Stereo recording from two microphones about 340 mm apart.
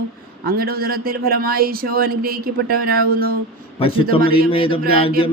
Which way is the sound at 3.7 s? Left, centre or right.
Centre.